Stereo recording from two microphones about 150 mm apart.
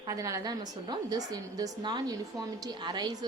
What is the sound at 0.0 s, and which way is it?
A woman's voice, 20° right (ahead or behind).